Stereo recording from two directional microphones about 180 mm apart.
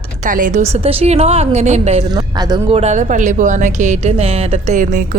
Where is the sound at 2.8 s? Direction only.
40° right (ahead or behind).